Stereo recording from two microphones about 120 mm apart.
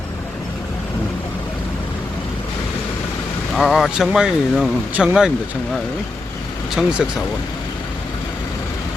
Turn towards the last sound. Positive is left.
turn(degrees=-5)  # may be behind; listen again after turning